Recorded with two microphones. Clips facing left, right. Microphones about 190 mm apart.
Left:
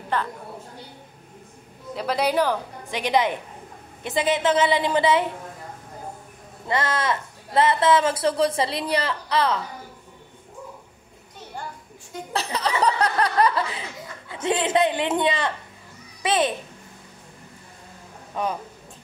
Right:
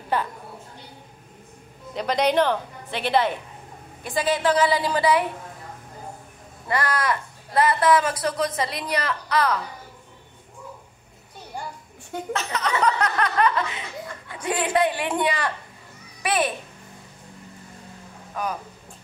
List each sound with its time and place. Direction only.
0.1 s a woman's voice: 10° right (ahead or behind)
2.0 s a woman's voice: 5° left (ahead or behind); by 5.2 s 25° left (ahead or behind)
6.7 s speech: 25° left (ahead or behind)
12.3 s speech: 30° left (ahead or behind)
14.4 s a child's voice: 20° left (ahead or behind)
18.3 s speech: 25° left (ahead or behind)